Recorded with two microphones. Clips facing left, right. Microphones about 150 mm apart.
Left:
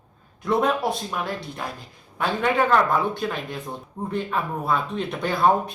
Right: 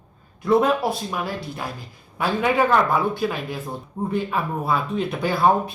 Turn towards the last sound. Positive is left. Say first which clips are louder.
# right 1 dB
turn(degrees=-5)  # may be behind; listen again after turning